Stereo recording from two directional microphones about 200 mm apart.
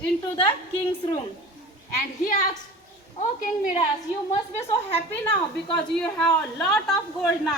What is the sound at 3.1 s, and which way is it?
Speech, 35° left (ahead or behind).